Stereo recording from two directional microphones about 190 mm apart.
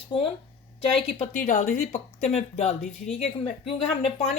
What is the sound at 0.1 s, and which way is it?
Speech, 25° left (ahead or behind).